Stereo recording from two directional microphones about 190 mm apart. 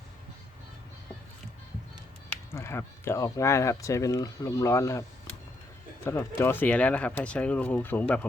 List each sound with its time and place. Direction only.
2.5 s speech: 15° left (ahead or behind)
6.1 s speech: 10° left (ahead or behind)